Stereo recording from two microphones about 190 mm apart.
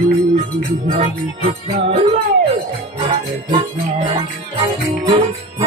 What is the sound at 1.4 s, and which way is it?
Music, 35° right (ahead or behind).